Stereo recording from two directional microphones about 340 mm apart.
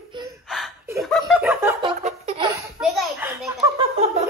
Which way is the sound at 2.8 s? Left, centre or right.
Centre.